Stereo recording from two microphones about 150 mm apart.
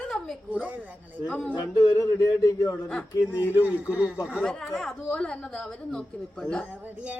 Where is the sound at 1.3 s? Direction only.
10° left (ahead or behind).